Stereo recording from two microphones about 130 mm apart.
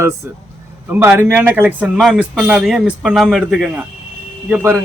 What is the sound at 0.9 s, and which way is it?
Speech, 15° right (ahead or behind).